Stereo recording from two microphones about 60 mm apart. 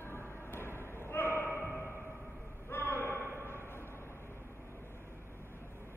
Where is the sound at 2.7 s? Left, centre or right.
Left.